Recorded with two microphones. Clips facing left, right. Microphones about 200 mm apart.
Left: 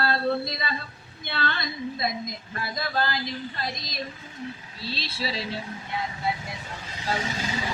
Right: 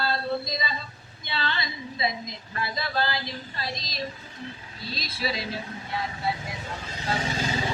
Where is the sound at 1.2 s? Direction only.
55° left (ahead or behind).